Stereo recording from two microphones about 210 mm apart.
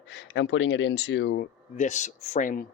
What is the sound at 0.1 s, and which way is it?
Speech, 60° left (ahead or behind).